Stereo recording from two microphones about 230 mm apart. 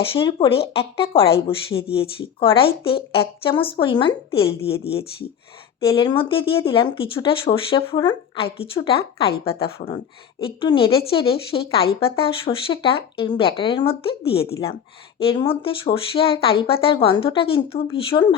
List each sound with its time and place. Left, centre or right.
0.0 s speech: left